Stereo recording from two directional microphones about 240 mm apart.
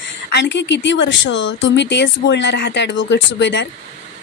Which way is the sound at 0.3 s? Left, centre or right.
Left.